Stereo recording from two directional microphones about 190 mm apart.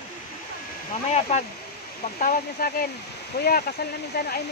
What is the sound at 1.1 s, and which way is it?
Speech, 35° left (ahead or behind).